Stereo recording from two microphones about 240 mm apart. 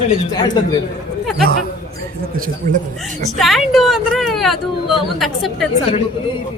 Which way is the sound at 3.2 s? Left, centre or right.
Centre.